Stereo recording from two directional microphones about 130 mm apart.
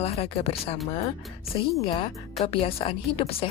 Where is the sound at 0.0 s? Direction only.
50° left (ahead or behind).